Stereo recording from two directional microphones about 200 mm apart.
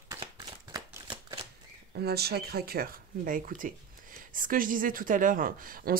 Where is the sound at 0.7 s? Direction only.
20° right (ahead or behind).